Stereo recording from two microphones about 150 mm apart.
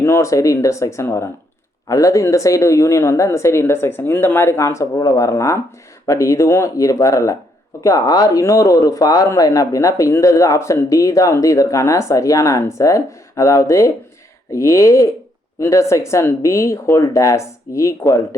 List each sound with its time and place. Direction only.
0.0 s speech: 20° left (ahead or behind)